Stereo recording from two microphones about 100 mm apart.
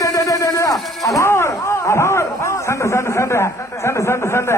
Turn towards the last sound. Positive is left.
turn(degrees=25)  # may be behind; listen again after turning